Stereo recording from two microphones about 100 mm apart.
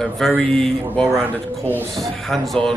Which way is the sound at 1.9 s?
Centre (ahead or behind).